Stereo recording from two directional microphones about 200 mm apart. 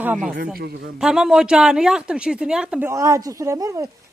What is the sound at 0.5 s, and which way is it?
Speech, 50° right (ahead or behind).